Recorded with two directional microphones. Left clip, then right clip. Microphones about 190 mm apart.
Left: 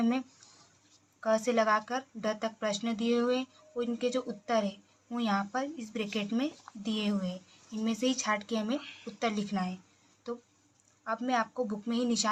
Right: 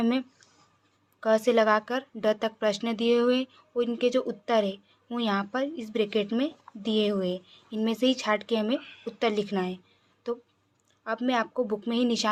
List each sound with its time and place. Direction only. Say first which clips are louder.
0.0 s speech: right 4 dB; 50° right (ahead or behind)
11.0 s speech: right 3 dB; 45° right (ahead or behind)